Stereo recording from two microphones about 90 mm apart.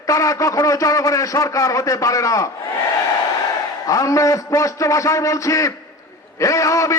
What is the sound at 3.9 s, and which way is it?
A man's voice, 40° left (ahead or behind).